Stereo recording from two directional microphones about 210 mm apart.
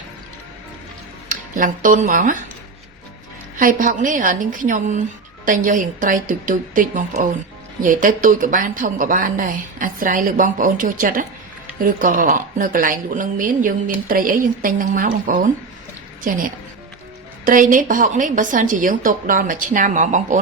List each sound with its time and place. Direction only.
1.3 s speech: 40° right (ahead or behind)
3.6 s speech: 40° right (ahead or behind)
17.4 s speech: 40° right (ahead or behind)